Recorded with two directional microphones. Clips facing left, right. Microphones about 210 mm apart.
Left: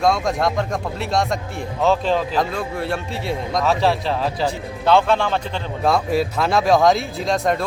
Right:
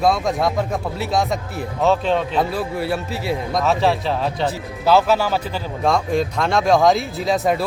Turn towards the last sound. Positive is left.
turn(degrees=-5)  # may be behind; listen again after turning